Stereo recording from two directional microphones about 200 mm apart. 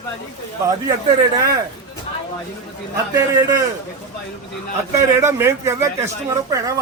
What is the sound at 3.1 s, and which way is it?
Speech, 15° right (ahead or behind).